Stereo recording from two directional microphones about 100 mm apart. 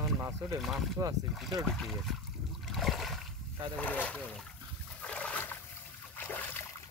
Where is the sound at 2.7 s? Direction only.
Centre (ahead or behind).